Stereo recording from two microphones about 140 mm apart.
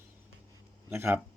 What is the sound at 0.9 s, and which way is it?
Speech, 15° right (ahead or behind).